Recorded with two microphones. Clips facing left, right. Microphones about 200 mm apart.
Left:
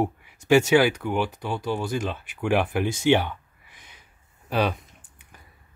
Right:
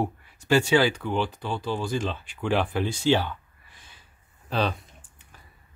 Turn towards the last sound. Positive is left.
turn(degrees=10)  # may be behind; listen again after turning